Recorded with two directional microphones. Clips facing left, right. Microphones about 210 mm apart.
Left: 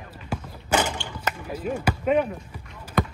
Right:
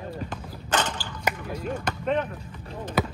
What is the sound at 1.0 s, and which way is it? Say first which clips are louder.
Basketball bounce: right 1 dB; centre (ahead or behind).